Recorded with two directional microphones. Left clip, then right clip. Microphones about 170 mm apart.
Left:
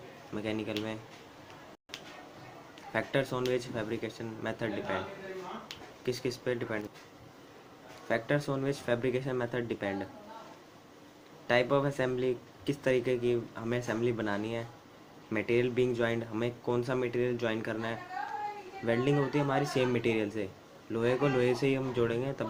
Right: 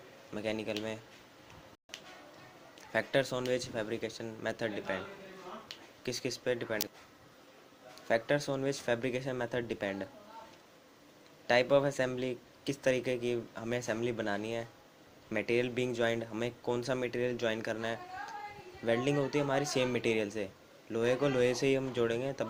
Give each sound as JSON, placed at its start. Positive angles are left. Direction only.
{"t": 0.3, "sound": "speech", "side_deg": -45}
{"t": 2.9, "sound": "speech", "side_deg": -45}
{"t": 6.1, "sound": "speech", "side_deg": -35}
{"t": 8.0, "sound": "speech", "side_deg": -40}
{"t": 11.4, "sound": "speech", "side_deg": -40}